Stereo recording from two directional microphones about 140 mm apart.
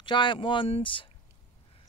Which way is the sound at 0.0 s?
35° left (ahead or behind).